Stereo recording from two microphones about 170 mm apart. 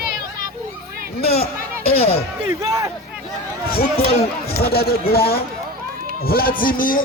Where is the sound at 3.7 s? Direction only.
65° left (ahead or behind).